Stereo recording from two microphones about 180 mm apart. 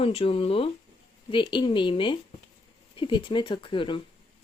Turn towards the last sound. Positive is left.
turn(degrees=30)  # may be behind; listen again after turning